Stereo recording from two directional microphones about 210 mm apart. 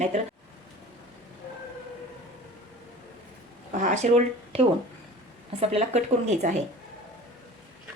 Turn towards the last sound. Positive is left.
turn(degrees=-35)  # may be behind; listen again after turning